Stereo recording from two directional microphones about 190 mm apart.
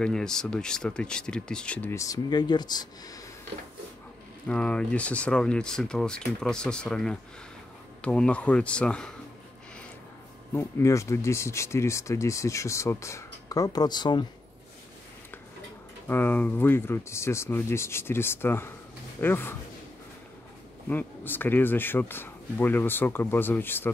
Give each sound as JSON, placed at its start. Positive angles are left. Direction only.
{"t": 0.0, "sound": "speech", "side_deg": 5}
{"t": 4.5, "sound": "speech", "side_deg": 5}
{"t": 10.5, "sound": "speech", "side_deg": 15}
{"t": 16.1, "sound": "speech", "side_deg": 10}
{"t": 20.9, "sound": "speech", "side_deg": 10}